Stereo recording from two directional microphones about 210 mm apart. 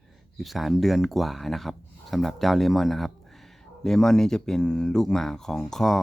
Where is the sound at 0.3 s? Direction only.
Centre (ahead or behind).